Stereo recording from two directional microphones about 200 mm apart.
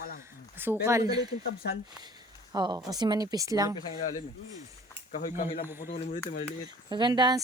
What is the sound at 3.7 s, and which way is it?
Speech, 20° left (ahead or behind).